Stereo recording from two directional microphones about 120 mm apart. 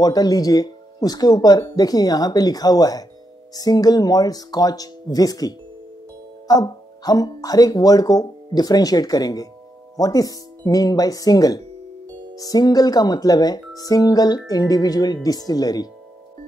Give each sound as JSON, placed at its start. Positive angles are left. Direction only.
{"t": 0.0, "sound": "speech", "side_deg": 35}